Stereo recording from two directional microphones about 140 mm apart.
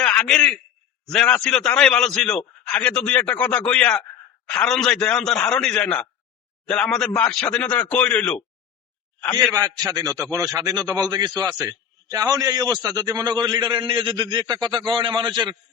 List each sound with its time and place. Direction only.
0.0 s a man's voice: 5° left (ahead or behind)
9.5 s a man's voice: 25° right (ahead or behind)